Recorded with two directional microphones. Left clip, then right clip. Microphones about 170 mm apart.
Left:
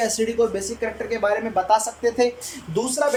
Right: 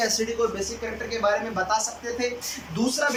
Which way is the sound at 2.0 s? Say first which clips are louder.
Left 9 dB; 55° left (ahead or behind).